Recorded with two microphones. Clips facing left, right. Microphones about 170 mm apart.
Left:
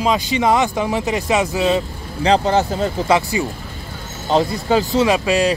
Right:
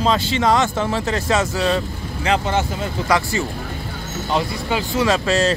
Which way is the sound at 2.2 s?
35° left (ahead or behind).